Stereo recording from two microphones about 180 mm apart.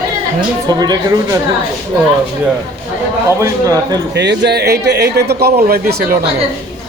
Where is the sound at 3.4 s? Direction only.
20° right (ahead or behind).